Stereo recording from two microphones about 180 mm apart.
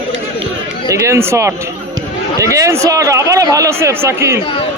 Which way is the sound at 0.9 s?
15° right (ahead or behind).